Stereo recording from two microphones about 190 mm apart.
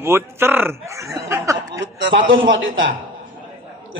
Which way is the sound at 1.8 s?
70° right (ahead or behind).